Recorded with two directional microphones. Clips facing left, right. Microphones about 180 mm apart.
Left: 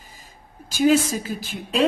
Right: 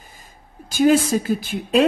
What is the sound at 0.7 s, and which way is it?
Speech, 55° right (ahead or behind).